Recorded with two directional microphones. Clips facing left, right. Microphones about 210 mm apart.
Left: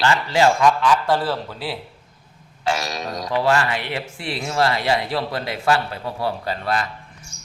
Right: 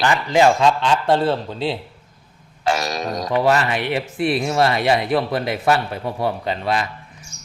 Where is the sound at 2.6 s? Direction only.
45° right (ahead or behind).